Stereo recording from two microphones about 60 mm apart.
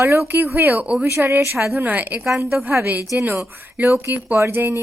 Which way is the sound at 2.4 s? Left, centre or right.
Right.